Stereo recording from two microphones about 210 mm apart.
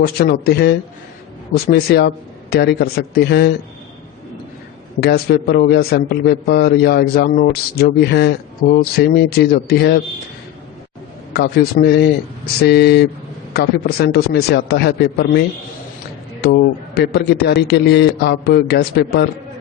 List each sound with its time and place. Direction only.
0.0 s a man's voice: 45° left (ahead or behind)
4.9 s a man's voice: 45° left (ahead or behind)
11.3 s a man's voice: 50° left (ahead or behind)